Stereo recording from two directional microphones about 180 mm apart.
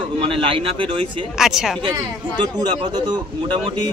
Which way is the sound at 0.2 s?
30° right (ahead or behind).